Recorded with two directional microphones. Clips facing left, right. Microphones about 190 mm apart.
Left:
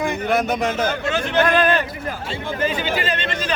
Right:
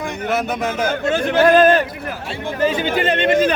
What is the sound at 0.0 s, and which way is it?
Speech, centre (ahead or behind).